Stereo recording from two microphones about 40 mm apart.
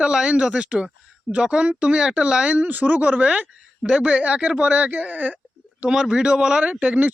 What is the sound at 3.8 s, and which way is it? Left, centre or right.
Speech, right.